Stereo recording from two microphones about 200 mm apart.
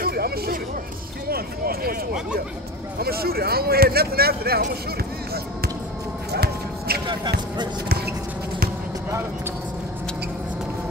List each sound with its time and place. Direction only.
0.0 s a sound: 50° right (ahead or behind)
1.3 s speech: 50° right (ahead or behind)
3.0 s speech: 50° right (ahead or behind)
6.3 s shuffle: 50° right (ahead or behind)
7.1 s speech: 20° right (ahead or behind)